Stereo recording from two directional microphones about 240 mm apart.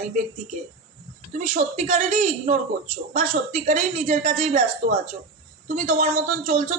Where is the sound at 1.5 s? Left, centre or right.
Right.